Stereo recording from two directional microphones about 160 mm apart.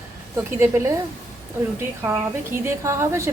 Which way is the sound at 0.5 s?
15° right (ahead or behind).